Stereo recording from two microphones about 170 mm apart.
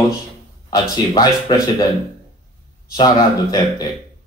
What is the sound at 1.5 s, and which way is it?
Speech, 25° left (ahead or behind).